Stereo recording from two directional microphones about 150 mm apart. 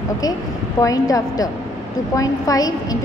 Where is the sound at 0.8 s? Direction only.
25° left (ahead or behind).